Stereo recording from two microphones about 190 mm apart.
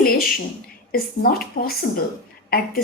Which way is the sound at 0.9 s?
50° left (ahead or behind).